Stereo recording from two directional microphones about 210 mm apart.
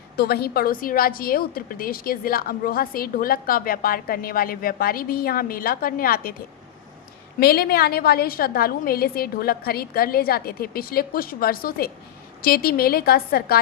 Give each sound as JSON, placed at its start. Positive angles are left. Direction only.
{"t": 0.2, "sound": "a woman's voice", "side_deg": 50}
{"t": 7.3, "sound": "a woman's voice", "side_deg": 45}